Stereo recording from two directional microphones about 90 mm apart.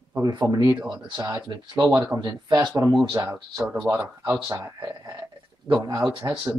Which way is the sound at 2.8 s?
35° right (ahead or behind).